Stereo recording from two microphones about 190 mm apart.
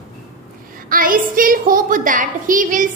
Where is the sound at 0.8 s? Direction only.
45° right (ahead or behind).